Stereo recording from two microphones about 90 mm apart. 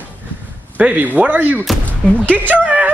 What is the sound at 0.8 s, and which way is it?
Speech, 20° right (ahead or behind).